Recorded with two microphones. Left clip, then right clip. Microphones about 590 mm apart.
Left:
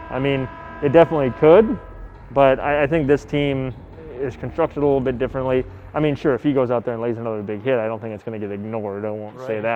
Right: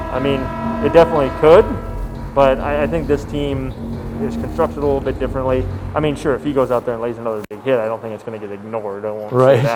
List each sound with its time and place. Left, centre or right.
0.1 s speech: left